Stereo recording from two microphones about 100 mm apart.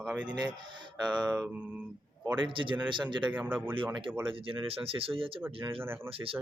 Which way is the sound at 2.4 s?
55° right (ahead or behind).